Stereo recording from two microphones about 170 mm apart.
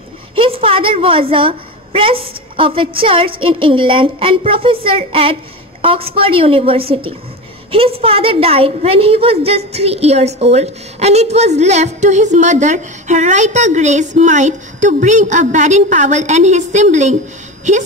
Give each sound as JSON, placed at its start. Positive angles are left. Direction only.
{"t": 0.4, "sound": "a woman's voice", "side_deg": -35}